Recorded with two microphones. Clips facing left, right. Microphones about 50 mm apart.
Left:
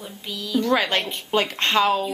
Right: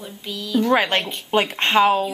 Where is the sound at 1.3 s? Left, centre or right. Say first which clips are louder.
Right 3 dB; right.